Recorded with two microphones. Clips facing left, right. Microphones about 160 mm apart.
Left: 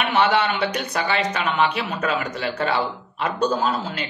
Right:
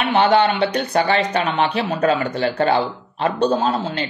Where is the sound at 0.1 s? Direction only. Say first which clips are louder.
Right 5 dB; 35° right (ahead or behind).